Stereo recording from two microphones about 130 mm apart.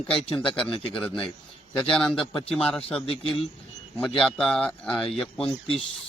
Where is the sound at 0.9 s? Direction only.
10° left (ahead or behind).